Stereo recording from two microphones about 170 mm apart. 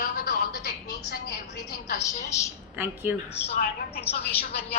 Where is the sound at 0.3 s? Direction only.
70° left (ahead or behind).